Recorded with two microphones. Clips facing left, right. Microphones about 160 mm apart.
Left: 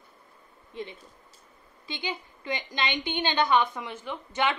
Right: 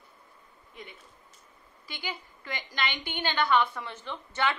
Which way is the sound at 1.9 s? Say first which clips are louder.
Left 4 dB; 20° left (ahead or behind).